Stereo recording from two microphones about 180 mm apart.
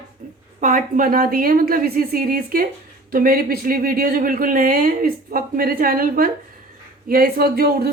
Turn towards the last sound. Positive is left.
turn(degrees=-60)  # may be behind; listen again after turning